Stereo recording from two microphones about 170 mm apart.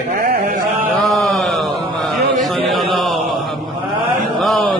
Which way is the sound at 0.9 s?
Centre (ahead or behind).